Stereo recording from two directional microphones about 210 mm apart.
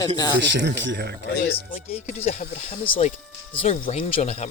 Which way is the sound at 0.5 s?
55° right (ahead or behind).